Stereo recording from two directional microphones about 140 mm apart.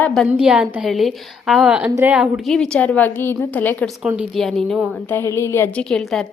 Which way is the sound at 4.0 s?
5° right (ahead or behind).